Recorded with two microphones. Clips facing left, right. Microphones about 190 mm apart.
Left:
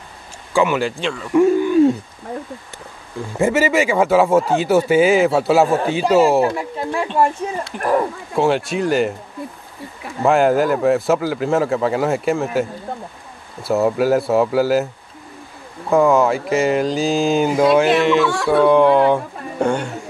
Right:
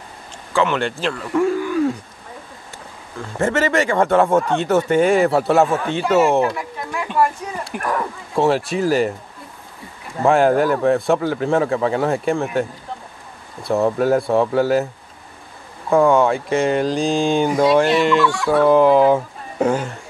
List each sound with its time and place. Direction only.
0.5 s speech: 10° left (ahead or behind)
1.3 s speech: 20° left (ahead or behind)
3.3 s speech: 10° left (ahead or behind)
6.0 s speech: 30° left (ahead or behind)
7.7 s speech: 10° right (ahead or behind)
8.4 s speech: centre (ahead or behind)
10.2 s speech: centre (ahead or behind)
15.9 s speech: centre (ahead or behind)